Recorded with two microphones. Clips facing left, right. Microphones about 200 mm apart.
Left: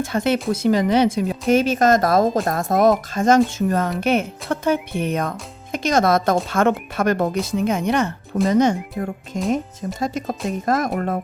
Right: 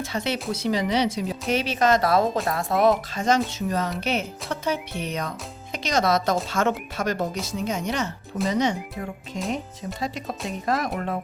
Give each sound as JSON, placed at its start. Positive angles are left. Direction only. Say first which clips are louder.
{"t": 0.0, "sound": "speech", "louder": "left 7 dB", "side_deg": 50}